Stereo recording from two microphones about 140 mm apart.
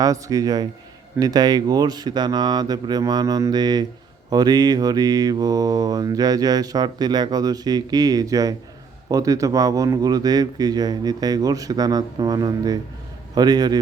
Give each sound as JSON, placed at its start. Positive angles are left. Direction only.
{"t": 0.0, "sound": "mantra", "side_deg": -25}